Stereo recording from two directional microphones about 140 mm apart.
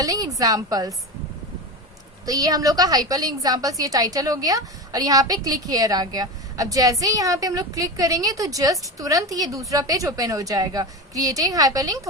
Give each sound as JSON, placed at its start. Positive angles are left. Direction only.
{"t": 0.0, "sound": "a woman's voice", "side_deg": -25}
{"t": 2.2, "sound": "a woman's voice", "side_deg": -25}